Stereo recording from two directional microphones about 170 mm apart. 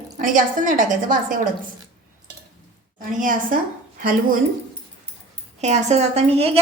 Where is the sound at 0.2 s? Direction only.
50° right (ahead or behind).